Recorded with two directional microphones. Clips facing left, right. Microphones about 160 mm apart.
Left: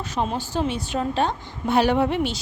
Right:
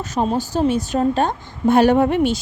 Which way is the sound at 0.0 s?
40° right (ahead or behind).